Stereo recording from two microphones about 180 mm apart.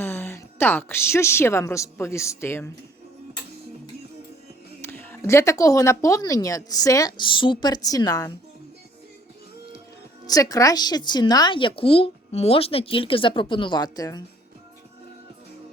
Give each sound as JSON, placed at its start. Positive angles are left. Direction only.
{"t": 0.0, "sound": "a woman's voice", "side_deg": 15}
{"t": 4.8, "sound": "a woman's voice", "side_deg": 10}
{"t": 10.2, "sound": "a woman's voice", "side_deg": 20}